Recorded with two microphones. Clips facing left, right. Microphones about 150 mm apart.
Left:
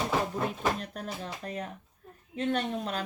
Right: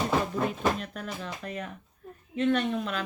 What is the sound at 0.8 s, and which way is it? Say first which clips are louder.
Speech: right 1 dB; 40° left (ahead or behind).